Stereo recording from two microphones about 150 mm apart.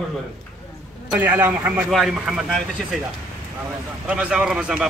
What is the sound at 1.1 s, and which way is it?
Speech, 15° right (ahead or behind).